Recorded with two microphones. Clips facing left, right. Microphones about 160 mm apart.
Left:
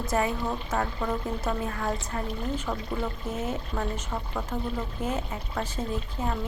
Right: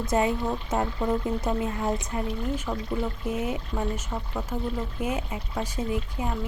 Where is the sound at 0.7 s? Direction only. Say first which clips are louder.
Right 4 dB; 20° right (ahead or behind).